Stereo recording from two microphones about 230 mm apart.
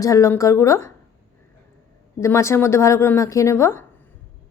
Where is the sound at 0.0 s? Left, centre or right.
Centre.